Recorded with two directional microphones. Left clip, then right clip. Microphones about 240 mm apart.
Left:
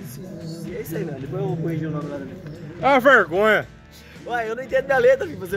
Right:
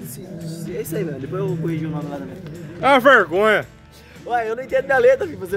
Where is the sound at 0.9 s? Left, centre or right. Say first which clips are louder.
Right 3 dB; right.